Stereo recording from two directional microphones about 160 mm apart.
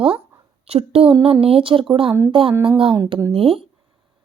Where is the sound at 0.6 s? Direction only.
40° right (ahead or behind).